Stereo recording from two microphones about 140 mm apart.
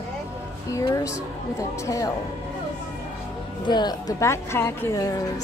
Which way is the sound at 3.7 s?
30° left (ahead or behind).